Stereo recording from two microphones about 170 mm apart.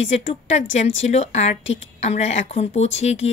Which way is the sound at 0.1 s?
40° left (ahead or behind).